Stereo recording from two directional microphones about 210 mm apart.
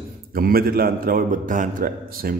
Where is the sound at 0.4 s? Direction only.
45° right (ahead or behind).